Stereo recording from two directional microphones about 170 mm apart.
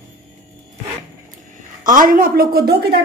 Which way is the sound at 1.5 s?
55° right (ahead or behind).